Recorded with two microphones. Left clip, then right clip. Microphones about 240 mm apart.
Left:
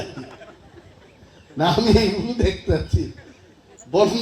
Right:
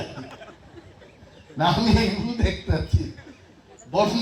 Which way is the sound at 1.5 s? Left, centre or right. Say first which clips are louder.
Left 4 dB; left.